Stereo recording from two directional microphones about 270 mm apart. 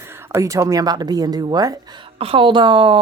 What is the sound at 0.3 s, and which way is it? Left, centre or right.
Speech, centre.